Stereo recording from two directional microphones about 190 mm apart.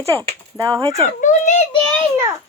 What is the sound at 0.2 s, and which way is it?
Speech, 20° right (ahead or behind).